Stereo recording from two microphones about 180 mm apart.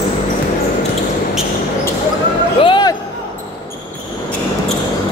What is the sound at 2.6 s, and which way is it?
Basketball bounce, 25° left (ahead or behind).